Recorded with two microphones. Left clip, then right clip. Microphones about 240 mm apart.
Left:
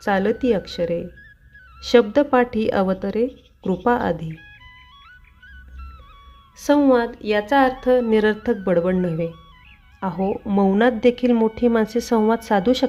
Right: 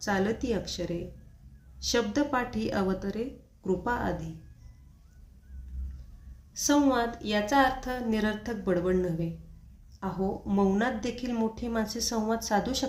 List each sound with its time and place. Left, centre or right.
0.0 s a woman's voice: left
6.6 s a woman's voice: left